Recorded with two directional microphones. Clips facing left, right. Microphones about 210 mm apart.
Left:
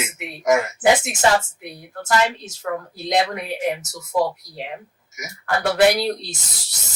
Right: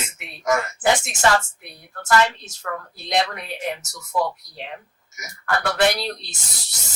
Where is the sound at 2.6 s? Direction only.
15° left (ahead or behind).